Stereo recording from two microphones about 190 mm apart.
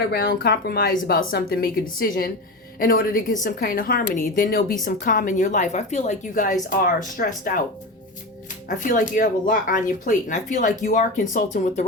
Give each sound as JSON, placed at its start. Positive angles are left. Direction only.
{"t": 0.1, "sound": "a woman's voice", "side_deg": 55}
{"t": 8.8, "sound": "a woman's voice", "side_deg": 45}